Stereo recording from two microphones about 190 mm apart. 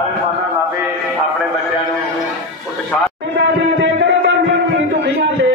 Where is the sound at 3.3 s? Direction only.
75° right (ahead or behind).